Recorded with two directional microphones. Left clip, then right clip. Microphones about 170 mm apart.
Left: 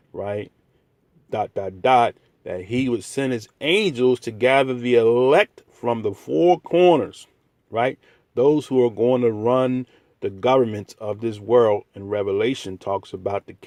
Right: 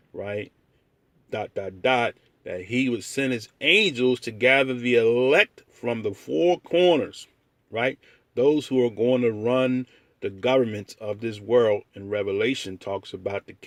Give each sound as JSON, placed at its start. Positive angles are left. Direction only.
{"t": 0.1, "sound": "a man's voice", "side_deg": 20}